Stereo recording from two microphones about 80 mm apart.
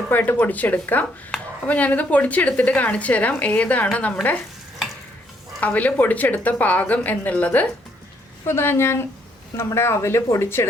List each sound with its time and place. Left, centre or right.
0.1 s a woman's voice: left
5.5 s a woman's voice: centre
8.4 s a woman's voice: left